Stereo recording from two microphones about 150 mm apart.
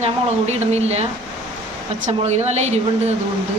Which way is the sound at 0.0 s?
45° right (ahead or behind).